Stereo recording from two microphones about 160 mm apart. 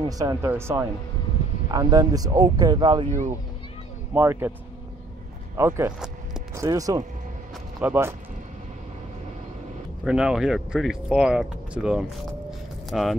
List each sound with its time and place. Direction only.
0.0 s speech: 20° right (ahead or behind)
3.1 s speech: 50° right (ahead or behind)
4.1 s speech: 15° right (ahead or behind)
5.6 s speech: 15° right (ahead or behind)
10.0 s speech: 5° right (ahead or behind)